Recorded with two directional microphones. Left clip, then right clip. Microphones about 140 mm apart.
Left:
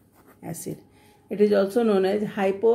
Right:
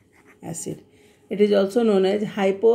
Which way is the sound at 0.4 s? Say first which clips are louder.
Right 2 dB; 25° right (ahead or behind).